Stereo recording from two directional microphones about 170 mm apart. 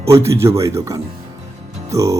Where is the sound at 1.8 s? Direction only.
20° right (ahead or behind).